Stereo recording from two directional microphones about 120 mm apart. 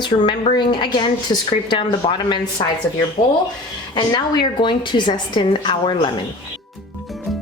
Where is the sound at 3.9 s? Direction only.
40° left (ahead or behind).